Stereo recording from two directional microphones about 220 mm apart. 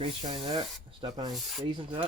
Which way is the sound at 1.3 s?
Centre (ahead or behind).